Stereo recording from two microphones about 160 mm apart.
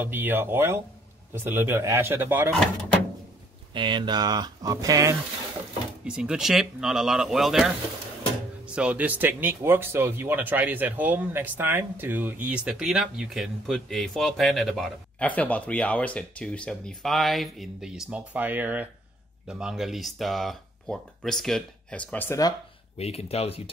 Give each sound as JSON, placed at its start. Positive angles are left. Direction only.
{"t": 0.0, "sound": "speech", "side_deg": -15}
{"t": 3.7, "sound": "speech", "side_deg": -30}
{"t": 6.0, "sound": "speech", "side_deg": -5}
{"t": 22.9, "sound": "speech", "side_deg": 40}